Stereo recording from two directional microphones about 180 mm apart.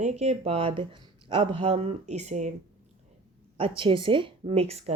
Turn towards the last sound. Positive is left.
turn(degrees=-35)  # may be behind; listen again after turning